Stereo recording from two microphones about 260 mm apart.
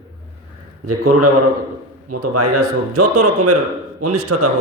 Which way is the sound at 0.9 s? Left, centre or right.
Right.